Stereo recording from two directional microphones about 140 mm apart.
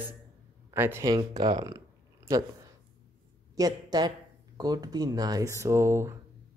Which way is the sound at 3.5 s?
25° right (ahead or behind).